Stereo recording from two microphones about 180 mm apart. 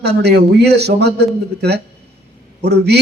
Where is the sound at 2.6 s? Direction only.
65° right (ahead or behind).